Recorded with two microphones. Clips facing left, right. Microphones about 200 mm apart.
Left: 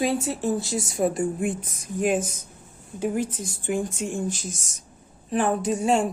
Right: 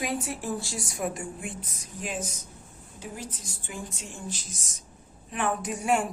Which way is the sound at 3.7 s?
50° left (ahead or behind).